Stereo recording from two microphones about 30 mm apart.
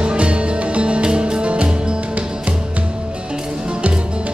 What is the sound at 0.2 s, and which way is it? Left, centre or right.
Music, right.